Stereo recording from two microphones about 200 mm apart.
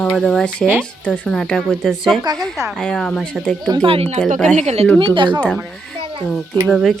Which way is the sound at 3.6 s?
20° right (ahead or behind).